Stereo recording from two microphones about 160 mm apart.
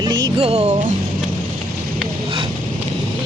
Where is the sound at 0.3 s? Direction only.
40° right (ahead or behind).